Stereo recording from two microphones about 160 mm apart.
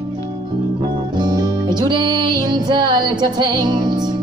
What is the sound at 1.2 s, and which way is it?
Music, 25° right (ahead or behind).